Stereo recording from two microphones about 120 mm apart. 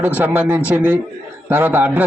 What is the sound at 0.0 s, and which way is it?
A man's voice, 10° right (ahead or behind).